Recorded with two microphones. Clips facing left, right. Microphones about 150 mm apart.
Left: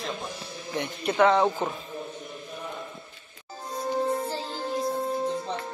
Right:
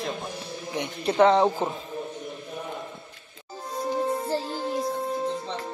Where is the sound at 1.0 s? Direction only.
30° right (ahead or behind).